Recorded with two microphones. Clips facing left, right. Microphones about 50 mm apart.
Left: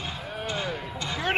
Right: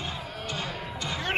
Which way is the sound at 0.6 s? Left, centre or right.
Centre.